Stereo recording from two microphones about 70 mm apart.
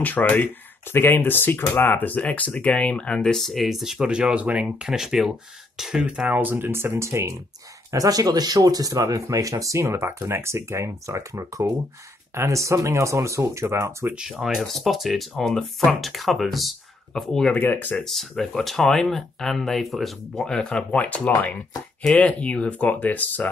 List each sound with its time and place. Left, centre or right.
0.0 s speech: left
3.3 s speech: centre
6.0 s speech: centre; by 7.3 s right
7.9 s speech: right
14.3 s speech: centre
17.6 s speech: left
17.9 s speech: centre; by 23.5 s left